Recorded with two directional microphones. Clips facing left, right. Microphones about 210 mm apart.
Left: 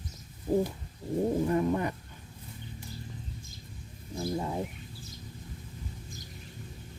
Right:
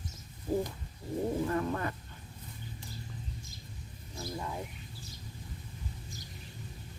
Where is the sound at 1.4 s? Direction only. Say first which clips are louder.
Left 5 dB; 20° left (ahead or behind).